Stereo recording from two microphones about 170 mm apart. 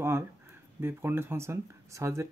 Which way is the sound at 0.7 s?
15° right (ahead or behind).